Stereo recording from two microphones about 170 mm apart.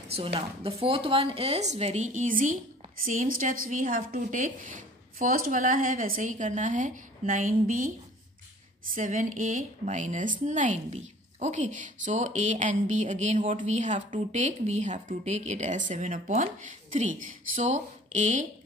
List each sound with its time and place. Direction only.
0.1 s a woman's voice: 35° right (ahead or behind); by 7.9 s 50° right (ahead or behind)
8.9 s a woman's voice: 50° right (ahead or behind)